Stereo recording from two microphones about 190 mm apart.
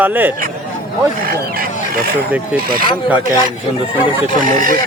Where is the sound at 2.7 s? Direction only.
50° right (ahead or behind).